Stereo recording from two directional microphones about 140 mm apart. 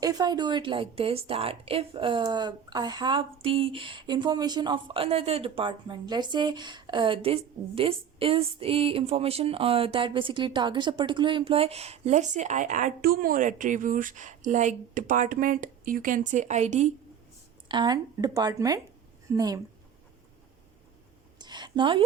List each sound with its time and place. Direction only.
0.0 s a woman's voice: 30° right (ahead or behind); by 16.9 s 55° right (ahead or behind)
17.7 s speech: 30° right (ahead or behind)
21.3 s a sound: 30° right (ahead or behind)